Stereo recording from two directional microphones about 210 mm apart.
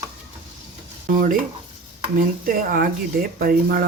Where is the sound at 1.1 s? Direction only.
40° right (ahead or behind).